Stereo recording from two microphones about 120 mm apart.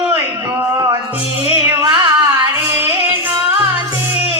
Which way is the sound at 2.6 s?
20° right (ahead or behind).